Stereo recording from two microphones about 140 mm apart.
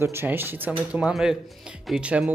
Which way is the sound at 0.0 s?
15° right (ahead or behind).